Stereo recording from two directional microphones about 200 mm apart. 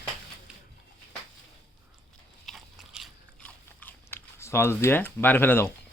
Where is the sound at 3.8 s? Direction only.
10° left (ahead or behind).